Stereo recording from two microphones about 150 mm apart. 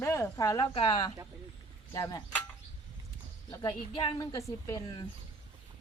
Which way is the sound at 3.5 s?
30° left (ahead or behind).